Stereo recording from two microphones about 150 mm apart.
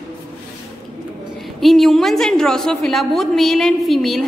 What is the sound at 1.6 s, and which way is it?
A woman's voice, centre (ahead or behind).